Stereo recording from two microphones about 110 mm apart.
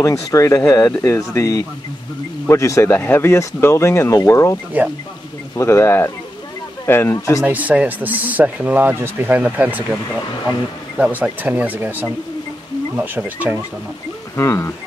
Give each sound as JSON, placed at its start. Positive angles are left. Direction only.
{"t": 0.0, "sound": "speech", "side_deg": 30}
{"t": 5.6, "sound": "speech", "side_deg": 25}
{"t": 7.4, "sound": "speech", "side_deg": -15}
{"t": 11.0, "sound": "speech", "side_deg": -15}
{"t": 14.3, "sound": "speech", "side_deg": 25}